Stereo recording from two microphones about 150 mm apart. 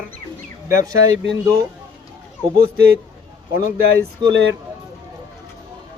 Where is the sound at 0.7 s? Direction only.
25° right (ahead or behind).